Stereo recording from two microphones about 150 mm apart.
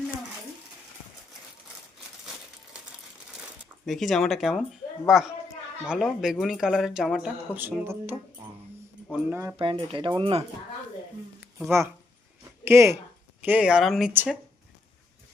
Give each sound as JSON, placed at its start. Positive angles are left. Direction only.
{"t": 3.8, "sound": "speech", "side_deg": 0}
{"t": 9.3, "sound": "speech", "side_deg": -15}
{"t": 9.6, "sound": "speech", "side_deg": -35}
{"t": 12.6, "sound": "speech", "side_deg": -20}
{"t": 14.1, "sound": "speech", "side_deg": -15}